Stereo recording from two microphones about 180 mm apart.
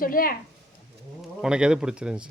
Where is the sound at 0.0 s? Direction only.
50° left (ahead or behind).